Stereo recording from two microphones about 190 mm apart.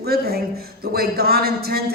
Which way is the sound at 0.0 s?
55° right (ahead or behind).